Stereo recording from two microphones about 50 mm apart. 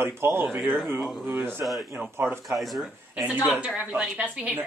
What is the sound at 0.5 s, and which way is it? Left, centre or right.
Speech, right.